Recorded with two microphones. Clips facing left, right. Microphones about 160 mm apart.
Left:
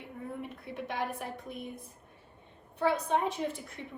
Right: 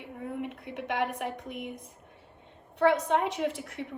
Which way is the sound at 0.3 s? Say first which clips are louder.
Right 5 dB; 70° right (ahead or behind).